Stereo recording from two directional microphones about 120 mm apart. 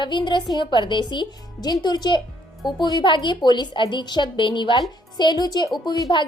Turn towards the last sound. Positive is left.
turn(degrees=40)  # may be behind; listen again after turning